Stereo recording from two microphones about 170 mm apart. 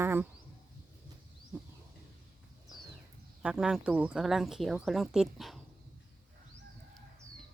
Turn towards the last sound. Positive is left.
turn(degrees=0)  # may be behind; listen again after turning